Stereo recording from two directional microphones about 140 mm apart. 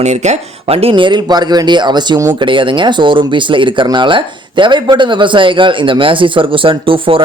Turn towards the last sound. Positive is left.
turn(degrees=-40)  # may be behind; listen again after turning